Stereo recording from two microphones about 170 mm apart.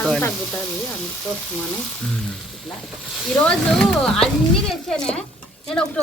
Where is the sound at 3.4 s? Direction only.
5° left (ahead or behind).